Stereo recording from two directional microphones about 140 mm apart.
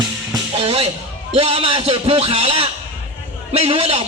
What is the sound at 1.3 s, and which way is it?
A man's voice, 45° right (ahead or behind).